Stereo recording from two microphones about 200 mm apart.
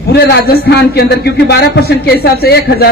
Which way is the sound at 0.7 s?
55° left (ahead or behind).